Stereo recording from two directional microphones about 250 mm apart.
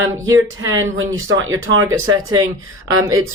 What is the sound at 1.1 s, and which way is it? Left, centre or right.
Speech, right.